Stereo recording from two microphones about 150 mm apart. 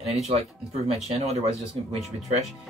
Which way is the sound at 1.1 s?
40° right (ahead or behind).